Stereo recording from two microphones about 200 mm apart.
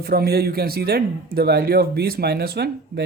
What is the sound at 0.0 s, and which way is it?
Speech, 50° right (ahead or behind).